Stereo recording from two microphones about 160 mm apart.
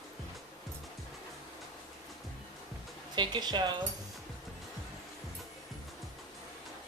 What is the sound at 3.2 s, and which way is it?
Speech, 25° right (ahead or behind).